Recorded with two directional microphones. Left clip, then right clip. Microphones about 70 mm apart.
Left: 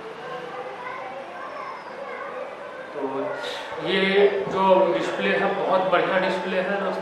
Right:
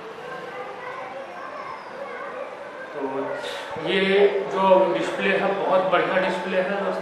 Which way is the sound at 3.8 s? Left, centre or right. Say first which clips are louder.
Even; centre.